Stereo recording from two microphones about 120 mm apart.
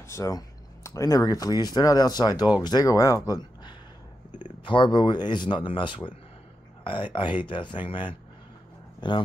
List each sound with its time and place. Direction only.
0.1 s speech: 30° left (ahead or behind)